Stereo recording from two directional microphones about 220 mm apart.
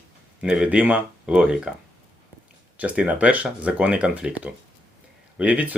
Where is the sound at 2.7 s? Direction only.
5° right (ahead or behind).